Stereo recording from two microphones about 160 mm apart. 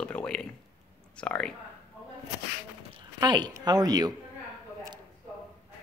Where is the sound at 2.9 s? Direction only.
30° right (ahead or behind).